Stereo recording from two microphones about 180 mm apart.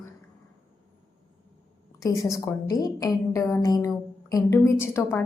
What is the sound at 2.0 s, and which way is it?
A woman's voice, 20° left (ahead or behind).